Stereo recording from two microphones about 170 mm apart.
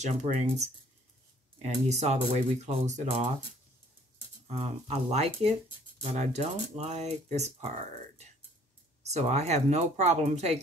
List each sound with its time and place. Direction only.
0.0 s speech: 45° right (ahead or behind)
4.5 s speech: 40° right (ahead or behind)
9.0 s speech: 40° right (ahead or behind)